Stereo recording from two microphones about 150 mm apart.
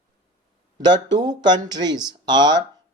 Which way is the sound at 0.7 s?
30° right (ahead or behind).